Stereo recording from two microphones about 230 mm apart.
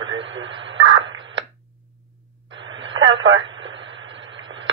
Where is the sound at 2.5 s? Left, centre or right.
Right.